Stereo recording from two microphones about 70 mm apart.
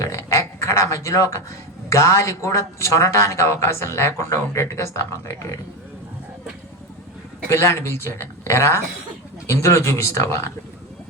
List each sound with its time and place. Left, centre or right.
0.0 s a sound: left
1.9 s speech: left
7.5 s speech: left